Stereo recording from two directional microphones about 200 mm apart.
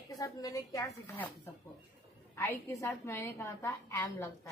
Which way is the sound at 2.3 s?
10° left (ahead or behind).